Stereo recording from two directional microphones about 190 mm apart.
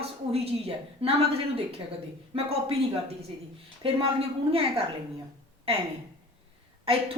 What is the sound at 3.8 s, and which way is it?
Speech, 30° right (ahead or behind).